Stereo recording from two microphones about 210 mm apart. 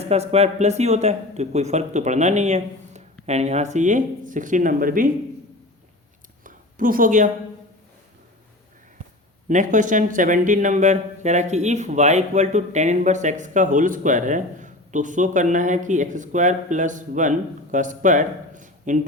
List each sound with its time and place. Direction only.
0.0 s speech: 30° right (ahead or behind)
6.4 s a sound: 40° right (ahead or behind)
9.5 s speech: 35° right (ahead or behind)